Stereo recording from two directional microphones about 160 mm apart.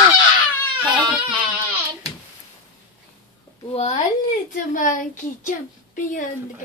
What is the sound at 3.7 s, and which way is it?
A child's voice, 45° left (ahead or behind).